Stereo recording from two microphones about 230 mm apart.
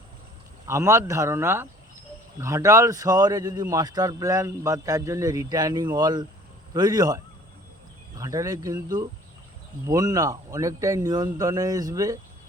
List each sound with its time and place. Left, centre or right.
0.7 s a man's voice: centre
8.2 s a man's voice: centre